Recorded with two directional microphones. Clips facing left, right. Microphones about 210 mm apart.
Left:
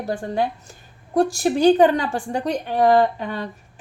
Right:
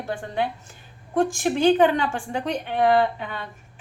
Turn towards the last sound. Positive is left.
turn(degrees=40)  # may be behind; listen again after turning